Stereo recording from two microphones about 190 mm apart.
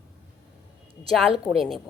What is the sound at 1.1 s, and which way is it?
Speech, centre (ahead or behind).